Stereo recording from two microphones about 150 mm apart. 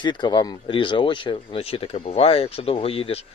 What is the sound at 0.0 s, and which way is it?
Speech, 30° left (ahead or behind).